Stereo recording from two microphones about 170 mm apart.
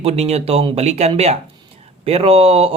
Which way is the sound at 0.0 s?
40° right (ahead or behind).